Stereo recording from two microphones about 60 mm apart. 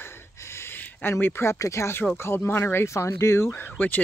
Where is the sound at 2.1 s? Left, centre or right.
Left.